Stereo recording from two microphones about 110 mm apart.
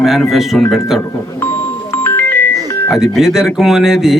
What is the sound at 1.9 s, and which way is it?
Music, 20° left (ahead or behind).